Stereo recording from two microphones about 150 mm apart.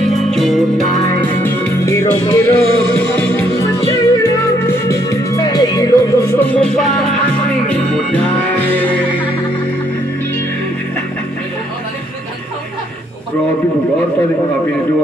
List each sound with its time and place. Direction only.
0.3 s music: centre (ahead or behind)
1.2 s music: 15° left (ahead or behind)
6.5 s music: 5° left (ahead or behind)